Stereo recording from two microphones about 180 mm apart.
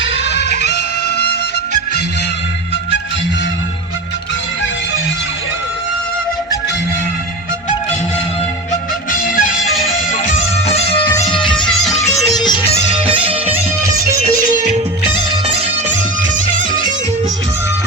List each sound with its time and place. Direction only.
0.0 s music: 80° left; by 1.4 s 65° left (ahead or behind)
9.1 s music: 50° left (ahead or behind); by 11.6 s 25° left (ahead or behind)
11.6 s music: centre (ahead or behind)
12.4 s music: 25° left (ahead or behind)
12.9 s music: 30° right (ahead or behind)
14.3 s music: 45° right (ahead or behind)
15.3 s music: 35° right (ahead or behind)